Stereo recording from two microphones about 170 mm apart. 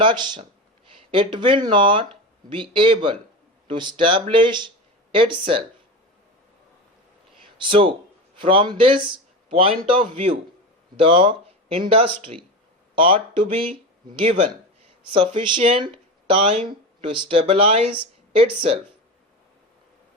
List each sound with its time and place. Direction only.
0.0 s speech: 25° right (ahead or behind)
7.7 s speech: 30° right (ahead or behind)
14.8 s speech: 30° right (ahead or behind)